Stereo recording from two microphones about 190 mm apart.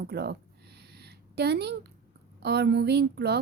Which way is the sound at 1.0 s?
60° right (ahead or behind).